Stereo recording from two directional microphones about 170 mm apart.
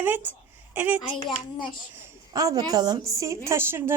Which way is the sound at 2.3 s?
20° right (ahead or behind).